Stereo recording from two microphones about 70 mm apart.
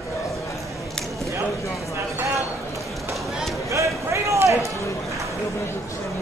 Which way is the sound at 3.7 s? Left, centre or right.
Right.